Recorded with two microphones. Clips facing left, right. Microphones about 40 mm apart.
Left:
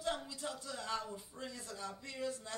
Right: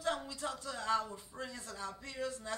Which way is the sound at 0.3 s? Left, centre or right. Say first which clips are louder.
Right 3 dB; right.